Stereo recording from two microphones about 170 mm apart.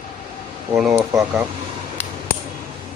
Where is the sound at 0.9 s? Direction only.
15° right (ahead or behind).